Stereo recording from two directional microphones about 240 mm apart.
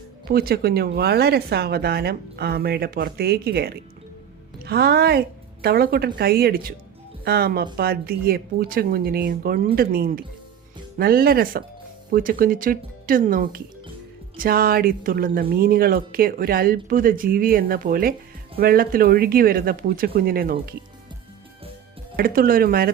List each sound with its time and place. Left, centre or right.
0.3 s speech: right
22.1 s speech: right